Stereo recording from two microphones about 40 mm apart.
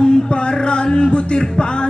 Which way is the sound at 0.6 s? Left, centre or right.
Left.